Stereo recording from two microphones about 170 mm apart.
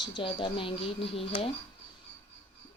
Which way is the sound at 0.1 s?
30° left (ahead or behind).